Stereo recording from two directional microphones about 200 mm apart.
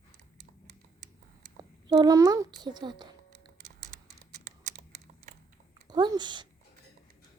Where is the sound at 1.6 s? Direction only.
20° right (ahead or behind).